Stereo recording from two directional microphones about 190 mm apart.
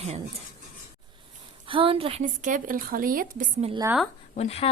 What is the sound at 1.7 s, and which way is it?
Speech, 25° right (ahead or behind).